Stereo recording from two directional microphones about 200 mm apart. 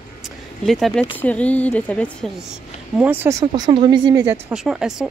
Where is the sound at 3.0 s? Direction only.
10° right (ahead or behind).